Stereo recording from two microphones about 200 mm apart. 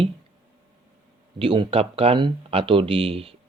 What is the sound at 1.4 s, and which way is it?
Speech, 25° right (ahead or behind).